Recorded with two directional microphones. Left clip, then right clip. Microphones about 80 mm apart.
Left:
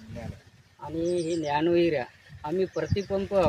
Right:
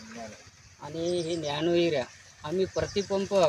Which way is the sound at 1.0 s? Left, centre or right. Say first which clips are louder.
Left 2 dB; left.